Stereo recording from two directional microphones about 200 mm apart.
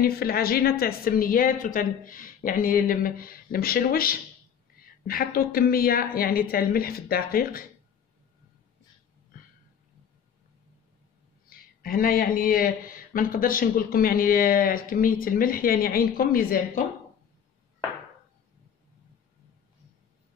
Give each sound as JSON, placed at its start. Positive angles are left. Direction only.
{"t": 0.0, "sound": "speech", "side_deg": 50}
{"t": 11.4, "sound": "speech", "side_deg": 45}